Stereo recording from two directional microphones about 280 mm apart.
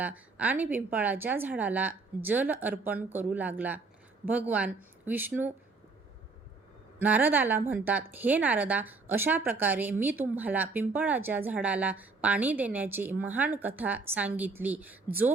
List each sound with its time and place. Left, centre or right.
0.0 s speech: centre
7.0 s a woman's voice: centre